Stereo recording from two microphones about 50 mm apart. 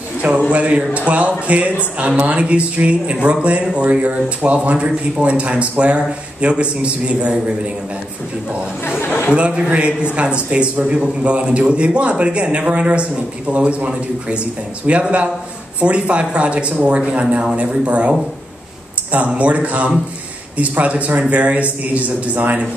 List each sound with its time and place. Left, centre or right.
0.5 s a man's voice: right
9.0 s chatter: left
9.3 s a man's voice: right
19.1 s a man's voice: right